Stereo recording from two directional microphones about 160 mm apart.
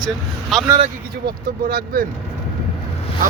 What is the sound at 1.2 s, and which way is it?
Speech, 70° right (ahead or behind).